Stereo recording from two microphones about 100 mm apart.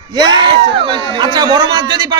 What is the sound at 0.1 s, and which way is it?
A man's voice, 45° right (ahead or behind).